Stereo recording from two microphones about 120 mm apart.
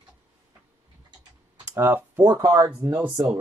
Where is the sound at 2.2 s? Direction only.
30° right (ahead or behind).